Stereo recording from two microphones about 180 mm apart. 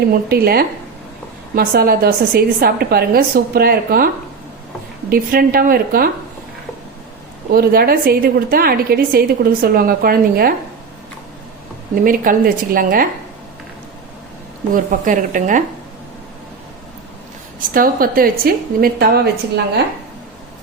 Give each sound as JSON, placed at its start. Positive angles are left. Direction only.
{"t": 0.3, "sound": "a woman's voice", "side_deg": -60}
{"t": 7.5, "sound": "a woman's voice", "side_deg": -55}
{"t": 12.0, "sound": "a woman's voice", "side_deg": -50}
{"t": 14.7, "sound": "a woman's voice", "side_deg": -45}
{"t": 17.6, "sound": "a woman's voice", "side_deg": -50}